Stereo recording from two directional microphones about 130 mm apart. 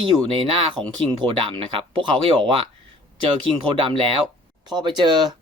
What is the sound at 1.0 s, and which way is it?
Speech, 40° right (ahead or behind).